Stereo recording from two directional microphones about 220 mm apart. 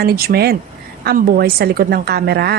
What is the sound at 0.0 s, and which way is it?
A woman's voice, 45° right (ahead or behind).